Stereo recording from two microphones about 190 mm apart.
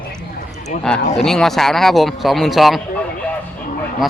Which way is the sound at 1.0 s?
35° left (ahead or behind).